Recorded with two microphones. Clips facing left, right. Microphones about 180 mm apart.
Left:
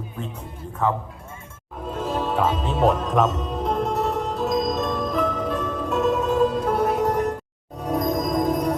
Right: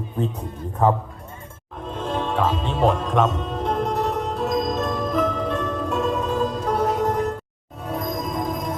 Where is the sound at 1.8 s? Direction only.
5° left (ahead or behind).